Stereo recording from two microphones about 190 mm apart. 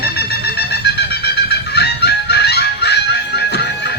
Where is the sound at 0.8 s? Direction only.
60° left (ahead or behind).